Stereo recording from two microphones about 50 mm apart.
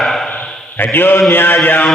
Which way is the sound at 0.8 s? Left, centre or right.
Left.